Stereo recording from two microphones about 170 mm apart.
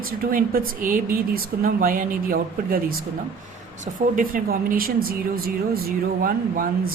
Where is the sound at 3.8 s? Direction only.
55° right (ahead or behind).